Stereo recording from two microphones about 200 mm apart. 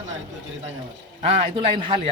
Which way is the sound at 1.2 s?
25° right (ahead or behind).